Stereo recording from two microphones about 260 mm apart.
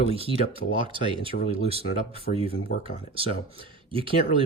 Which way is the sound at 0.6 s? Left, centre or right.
Left.